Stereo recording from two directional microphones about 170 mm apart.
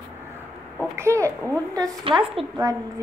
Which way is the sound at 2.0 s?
35° right (ahead or behind).